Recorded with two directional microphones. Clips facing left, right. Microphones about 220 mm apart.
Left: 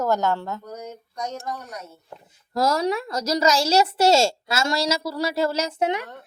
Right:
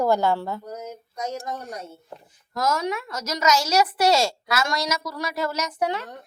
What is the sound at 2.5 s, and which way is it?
A woman's voice, 35° left (ahead or behind).